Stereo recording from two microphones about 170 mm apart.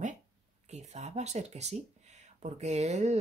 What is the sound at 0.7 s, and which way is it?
Speech, 40° right (ahead or behind).